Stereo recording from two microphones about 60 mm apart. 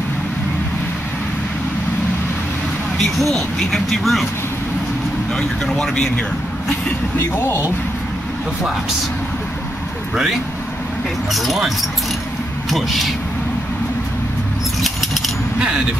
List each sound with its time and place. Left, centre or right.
3.2 s speech: centre
5.7 s speech: centre
7.2 s speech: left
11.3 s speech: centre
14.8 s a sound: centre